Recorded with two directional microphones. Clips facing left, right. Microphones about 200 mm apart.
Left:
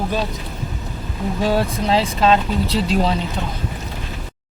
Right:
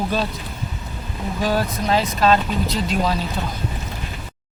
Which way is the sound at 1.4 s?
25° left (ahead or behind).